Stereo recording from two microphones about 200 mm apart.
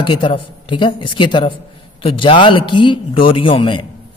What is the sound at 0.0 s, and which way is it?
A man's voice, 25° left (ahead or behind).